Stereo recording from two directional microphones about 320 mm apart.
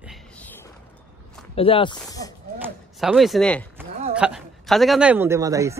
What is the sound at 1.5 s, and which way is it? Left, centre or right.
Speech, centre.